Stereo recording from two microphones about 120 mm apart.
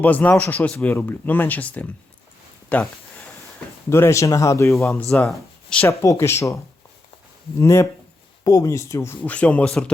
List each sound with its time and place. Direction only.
0.0 s speech: 15° left (ahead or behind)
2.6 s a sound: 15° left (ahead or behind)
3.8 s speech: 20° left (ahead or behind)
5.1 s speech: 5° left (ahead or behind)
5.8 s speech: 25° left (ahead or behind)
7.6 s speech: 20° left (ahead or behind)